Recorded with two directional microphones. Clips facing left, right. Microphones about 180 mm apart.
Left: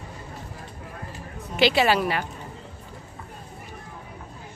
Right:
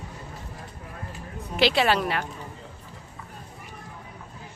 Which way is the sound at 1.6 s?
Centre (ahead or behind).